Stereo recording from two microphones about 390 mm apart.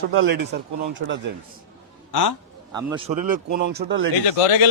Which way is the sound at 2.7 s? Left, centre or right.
Centre.